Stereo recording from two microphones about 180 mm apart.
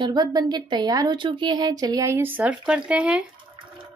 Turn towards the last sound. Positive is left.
turn(degrees=-5)  # may be behind; listen again after turning